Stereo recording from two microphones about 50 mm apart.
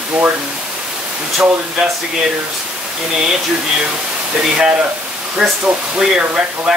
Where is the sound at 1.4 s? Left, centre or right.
Centre.